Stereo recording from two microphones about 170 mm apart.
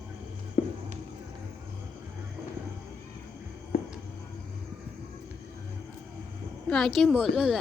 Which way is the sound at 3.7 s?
65° left (ahead or behind).